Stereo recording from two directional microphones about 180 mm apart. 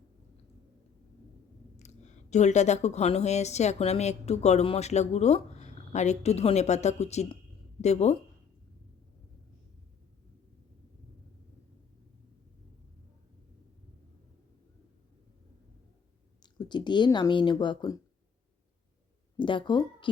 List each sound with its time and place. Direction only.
1.7 s speech: 40° left (ahead or behind)
16.4 s speech: 25° left (ahead or behind)
19.4 s speech: 25° left (ahead or behind)